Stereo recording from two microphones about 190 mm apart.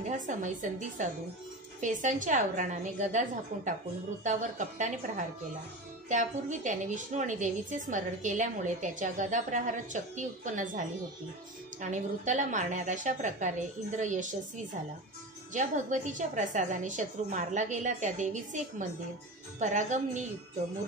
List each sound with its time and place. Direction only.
0.0 s a woman's voice: 40° right (ahead or behind)
11.8 s a woman's voice: 40° right (ahead or behind)